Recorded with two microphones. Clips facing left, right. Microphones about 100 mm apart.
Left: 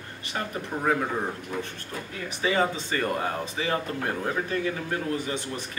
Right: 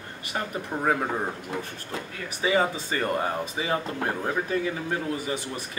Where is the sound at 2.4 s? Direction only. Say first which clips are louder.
Right 1 dB; 15° right (ahead or behind).